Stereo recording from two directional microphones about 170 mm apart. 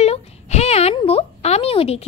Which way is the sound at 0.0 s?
40° left (ahead or behind).